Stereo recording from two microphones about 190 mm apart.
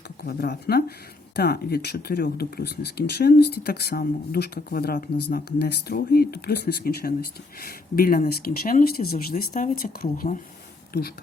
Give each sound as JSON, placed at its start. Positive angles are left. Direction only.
{"t": 0.3, "sound": "speech", "side_deg": 55}